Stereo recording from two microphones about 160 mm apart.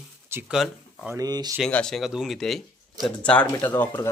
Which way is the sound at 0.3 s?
15° right (ahead or behind).